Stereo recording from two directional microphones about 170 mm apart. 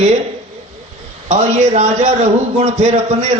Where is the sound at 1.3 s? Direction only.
40° right (ahead or behind).